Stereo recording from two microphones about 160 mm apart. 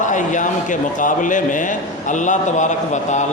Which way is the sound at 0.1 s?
50° left (ahead or behind).